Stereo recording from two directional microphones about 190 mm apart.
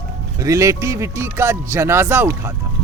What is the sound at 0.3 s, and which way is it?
Speech, 15° right (ahead or behind).